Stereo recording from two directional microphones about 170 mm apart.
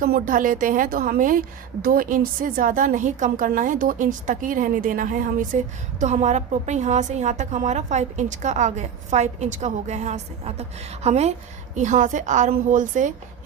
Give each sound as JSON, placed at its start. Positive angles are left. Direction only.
{"t": 0.0, "sound": "a woman's voice", "side_deg": -55}